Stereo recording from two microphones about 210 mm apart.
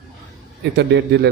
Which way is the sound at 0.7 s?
55° right (ahead or behind).